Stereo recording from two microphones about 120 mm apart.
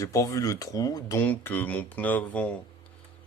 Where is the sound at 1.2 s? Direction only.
15° left (ahead or behind).